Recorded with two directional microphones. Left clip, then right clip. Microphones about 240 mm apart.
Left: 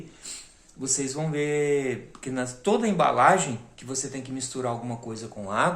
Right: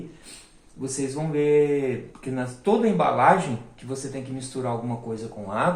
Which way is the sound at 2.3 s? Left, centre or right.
Left.